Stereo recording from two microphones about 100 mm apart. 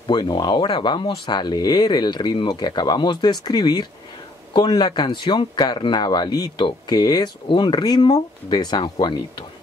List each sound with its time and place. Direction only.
0.1 s speech: 45° left (ahead or behind)